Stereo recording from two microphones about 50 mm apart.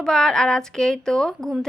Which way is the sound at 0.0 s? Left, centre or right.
Centre.